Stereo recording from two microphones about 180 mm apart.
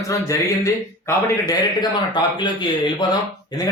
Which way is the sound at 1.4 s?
20° left (ahead or behind).